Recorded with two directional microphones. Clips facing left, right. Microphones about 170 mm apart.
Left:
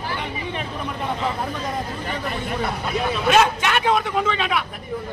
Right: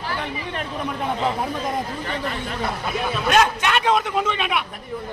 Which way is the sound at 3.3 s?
Centre (ahead or behind).